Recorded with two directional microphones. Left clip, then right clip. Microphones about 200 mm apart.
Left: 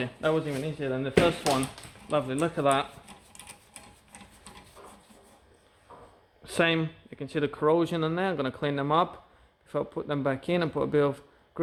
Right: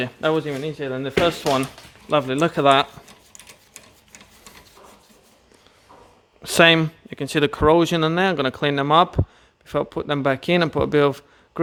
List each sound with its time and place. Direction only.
0.0 s speech: 55° right (ahead or behind)
2.0 s speech: 60° right (ahead or behind)
6.4 s speech: 60° right (ahead or behind)